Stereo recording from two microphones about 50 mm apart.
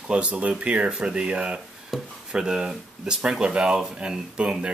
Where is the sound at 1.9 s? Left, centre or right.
Centre.